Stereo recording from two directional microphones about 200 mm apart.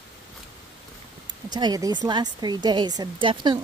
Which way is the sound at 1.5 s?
20° right (ahead or behind).